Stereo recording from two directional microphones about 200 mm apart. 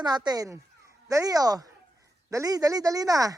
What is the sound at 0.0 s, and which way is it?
Speech, 20° right (ahead or behind).